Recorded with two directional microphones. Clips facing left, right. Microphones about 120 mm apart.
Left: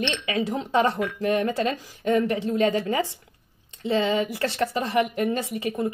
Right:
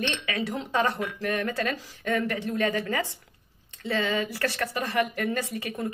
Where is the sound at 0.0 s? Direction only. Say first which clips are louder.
Left 4 dB; 25° left (ahead or behind).